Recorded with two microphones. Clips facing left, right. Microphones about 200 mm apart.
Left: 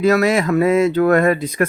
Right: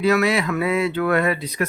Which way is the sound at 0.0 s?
45° left (ahead or behind).